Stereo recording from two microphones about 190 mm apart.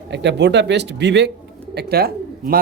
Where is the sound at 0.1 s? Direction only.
65° right (ahead or behind).